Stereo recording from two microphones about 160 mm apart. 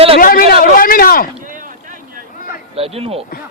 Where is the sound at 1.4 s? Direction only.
55° right (ahead or behind).